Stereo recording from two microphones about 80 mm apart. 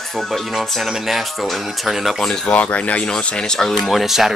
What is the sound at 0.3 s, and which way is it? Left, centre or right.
Speech, centre.